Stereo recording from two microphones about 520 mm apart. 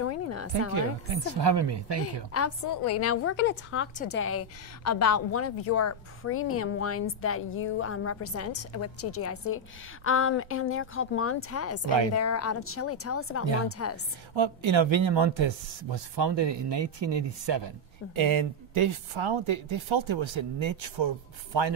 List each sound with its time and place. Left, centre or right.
0.0 s a sound: left
1.1 s a woman's voice: right
2.3 s a woman's voice: left
14.3 s speech: right